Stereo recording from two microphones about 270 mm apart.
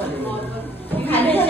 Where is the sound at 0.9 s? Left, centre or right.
Centre.